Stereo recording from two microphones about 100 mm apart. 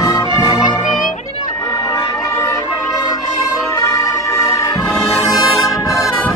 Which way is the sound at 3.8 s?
35° left (ahead or behind).